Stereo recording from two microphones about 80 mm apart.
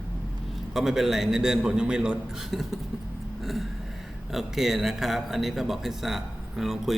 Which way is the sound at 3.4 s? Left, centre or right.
Centre.